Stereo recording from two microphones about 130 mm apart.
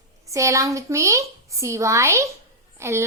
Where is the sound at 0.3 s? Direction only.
25° right (ahead or behind).